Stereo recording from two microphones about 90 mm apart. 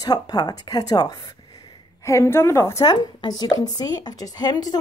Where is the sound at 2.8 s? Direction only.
50° left (ahead or behind).